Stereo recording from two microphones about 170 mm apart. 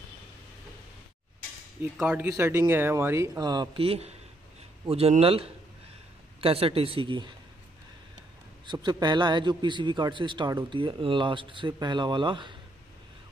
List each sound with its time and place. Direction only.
1.8 s a man's voice: 10° right (ahead or behind); by 7.3 s 30° right (ahead or behind)
8.6 s a man's voice: 25° right (ahead or behind)